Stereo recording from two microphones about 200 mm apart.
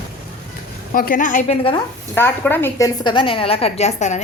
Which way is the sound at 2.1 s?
10° left (ahead or behind).